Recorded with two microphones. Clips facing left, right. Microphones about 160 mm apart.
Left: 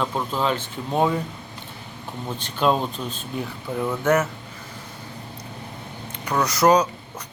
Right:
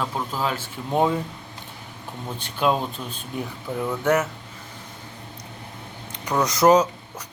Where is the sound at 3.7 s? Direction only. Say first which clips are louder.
Left 1 dB; 20° left (ahead or behind).